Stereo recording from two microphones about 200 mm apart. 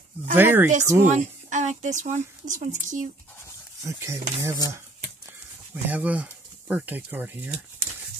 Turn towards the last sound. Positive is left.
turn(degrees=-10)  # may be behind; listen again after turning